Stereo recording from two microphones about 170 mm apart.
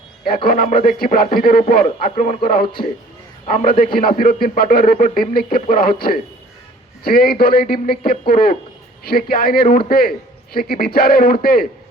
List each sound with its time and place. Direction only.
0.4 s a man's voice: 60° left (ahead or behind)